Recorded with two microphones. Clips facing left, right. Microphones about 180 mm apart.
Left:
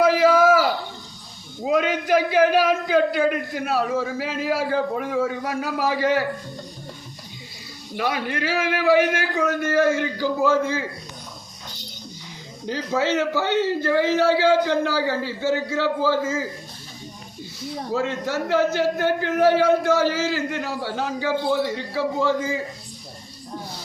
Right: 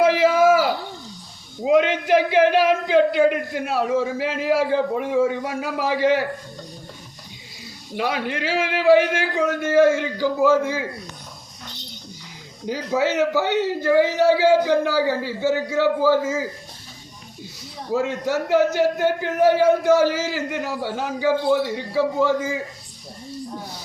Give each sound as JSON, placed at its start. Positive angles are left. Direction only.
{"t": 0.2, "sound": "a sound", "side_deg": -20}
{"t": 1.9, "sound": "a man's voice", "side_deg": -20}
{"t": 7.9, "sound": "a man's voice", "side_deg": -15}
{"t": 12.6, "sound": "a man's voice", "side_deg": -10}
{"t": 17.9, "sound": "a man's voice", "side_deg": -15}